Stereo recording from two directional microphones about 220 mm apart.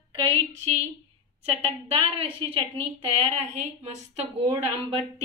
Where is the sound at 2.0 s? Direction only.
25° right (ahead or behind).